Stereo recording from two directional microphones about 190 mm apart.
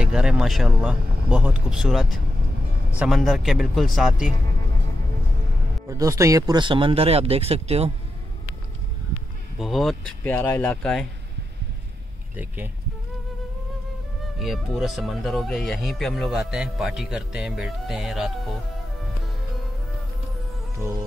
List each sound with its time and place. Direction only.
0.0 s speech: 5° right (ahead or behind)
5.9 s speech: 15° right (ahead or behind); by 7.9 s 35° right (ahead or behind)
9.6 s speech: centre (ahead or behind)
12.4 s speech: 10° right (ahead or behind)
14.4 s speech: centre (ahead or behind)